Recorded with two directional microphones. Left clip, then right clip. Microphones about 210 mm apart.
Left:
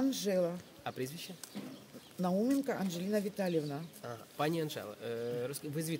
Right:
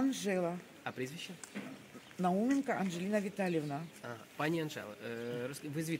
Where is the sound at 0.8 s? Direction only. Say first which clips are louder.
Left 1 dB; 55° left (ahead or behind).